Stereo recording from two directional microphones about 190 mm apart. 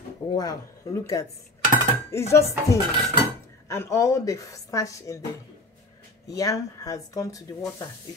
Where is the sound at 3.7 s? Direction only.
15° left (ahead or behind).